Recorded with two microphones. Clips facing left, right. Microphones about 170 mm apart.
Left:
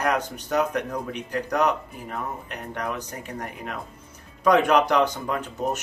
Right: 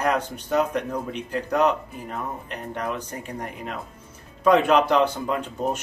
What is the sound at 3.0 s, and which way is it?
Speech, 10° right (ahead or behind).